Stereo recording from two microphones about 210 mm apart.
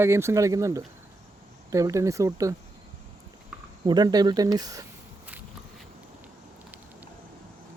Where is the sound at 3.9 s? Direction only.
20° right (ahead or behind).